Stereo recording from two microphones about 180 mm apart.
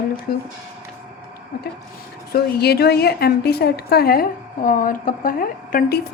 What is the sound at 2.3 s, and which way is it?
A woman's voice, 60° left (ahead or behind).